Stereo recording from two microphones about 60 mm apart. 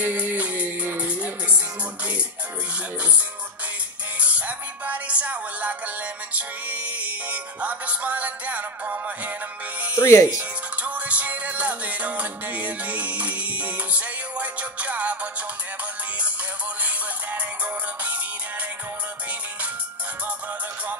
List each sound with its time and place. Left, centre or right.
0.0 s music: right
4.2 s music: right
9.9 s speech: left
10.8 s music: right
16.8 s music: right